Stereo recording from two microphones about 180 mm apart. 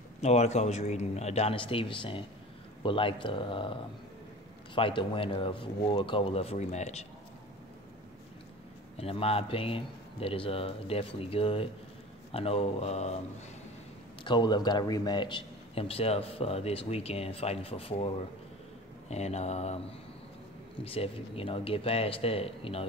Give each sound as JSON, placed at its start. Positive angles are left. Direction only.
{"t": 0.2, "sound": "a man's voice", "side_deg": 40}
{"t": 8.9, "sound": "a man's voice", "side_deg": 35}
{"t": 14.2, "sound": "a man's voice", "side_deg": 25}
{"t": 20.8, "sound": "a man's voice", "side_deg": 30}